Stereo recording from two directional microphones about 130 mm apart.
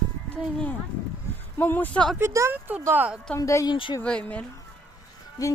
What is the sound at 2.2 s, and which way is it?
A woman's voice, 20° right (ahead or behind).